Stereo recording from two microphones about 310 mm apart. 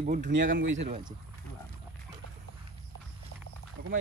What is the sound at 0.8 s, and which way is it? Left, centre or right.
Speech, centre.